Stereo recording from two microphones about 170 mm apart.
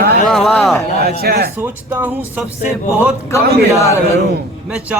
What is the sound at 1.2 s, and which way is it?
Speech, 70° right (ahead or behind).